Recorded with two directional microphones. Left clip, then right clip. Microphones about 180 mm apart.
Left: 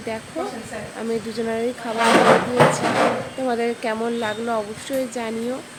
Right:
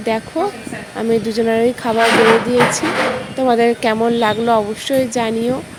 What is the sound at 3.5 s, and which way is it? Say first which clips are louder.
Speech: right 10 dB; 35° right (ahead or behind).